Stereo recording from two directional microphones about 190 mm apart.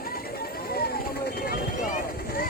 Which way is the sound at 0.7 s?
55° left (ahead or behind).